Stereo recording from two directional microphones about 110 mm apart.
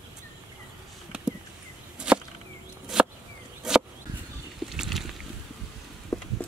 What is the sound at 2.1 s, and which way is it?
Chop, 10° right (ahead or behind).